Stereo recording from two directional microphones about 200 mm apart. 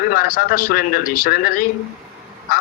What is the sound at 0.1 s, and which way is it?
A man's voice, 45° left (ahead or behind).